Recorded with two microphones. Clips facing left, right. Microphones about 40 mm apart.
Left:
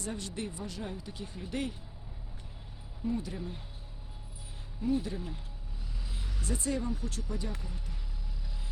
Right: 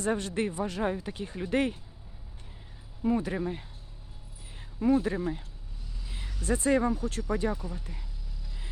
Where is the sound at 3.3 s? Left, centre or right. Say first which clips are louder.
Right 9 dB; right.